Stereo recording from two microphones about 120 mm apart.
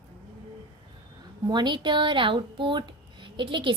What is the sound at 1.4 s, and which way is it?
A woman's voice, 40° right (ahead or behind).